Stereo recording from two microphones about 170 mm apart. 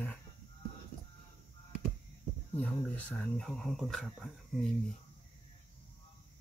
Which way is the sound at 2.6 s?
10° left (ahead or behind).